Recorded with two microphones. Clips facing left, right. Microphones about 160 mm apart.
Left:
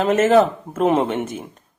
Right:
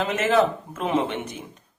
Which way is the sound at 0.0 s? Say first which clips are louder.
Left 6 dB; 45° left (ahead or behind).